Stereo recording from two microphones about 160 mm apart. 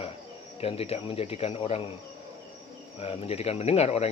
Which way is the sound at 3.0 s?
40° left (ahead or behind).